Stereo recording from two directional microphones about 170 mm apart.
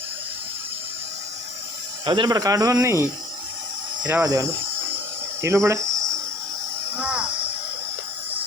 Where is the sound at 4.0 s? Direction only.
5° right (ahead or behind).